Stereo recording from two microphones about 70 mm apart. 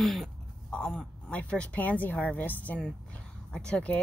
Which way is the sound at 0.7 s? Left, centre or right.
Centre.